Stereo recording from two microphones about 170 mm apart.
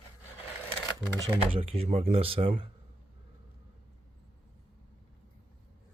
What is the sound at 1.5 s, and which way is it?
Speech, 35° right (ahead or behind).